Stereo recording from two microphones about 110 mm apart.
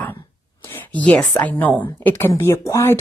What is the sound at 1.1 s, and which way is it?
A woman's voice, 10° left (ahead or behind).